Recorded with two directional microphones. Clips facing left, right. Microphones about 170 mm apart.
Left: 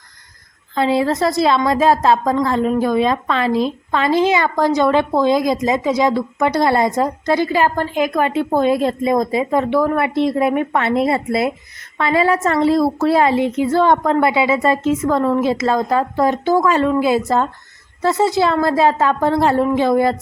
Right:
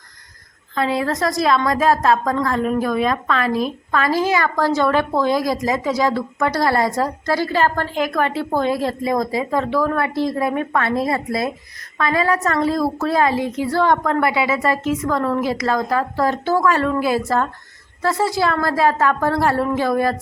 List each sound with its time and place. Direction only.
0.8 s a woman's voice: 30° left (ahead or behind)